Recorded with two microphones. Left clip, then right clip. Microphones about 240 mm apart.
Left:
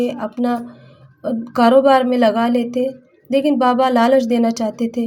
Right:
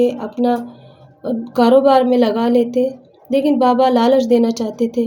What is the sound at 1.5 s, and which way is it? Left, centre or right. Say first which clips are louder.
A woman's voice: even; left.